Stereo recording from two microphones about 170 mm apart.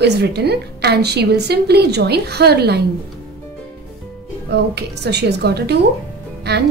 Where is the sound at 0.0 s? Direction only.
75° right (ahead or behind).